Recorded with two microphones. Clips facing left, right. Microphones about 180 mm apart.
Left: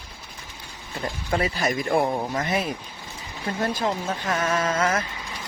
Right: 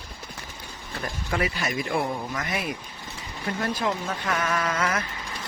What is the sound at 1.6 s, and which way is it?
Speech, 40° left (ahead or behind).